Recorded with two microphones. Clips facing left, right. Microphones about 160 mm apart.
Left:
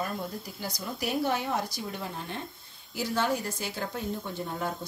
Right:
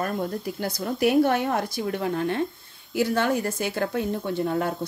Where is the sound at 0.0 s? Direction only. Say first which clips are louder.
Right 7 dB; 60° right (ahead or behind).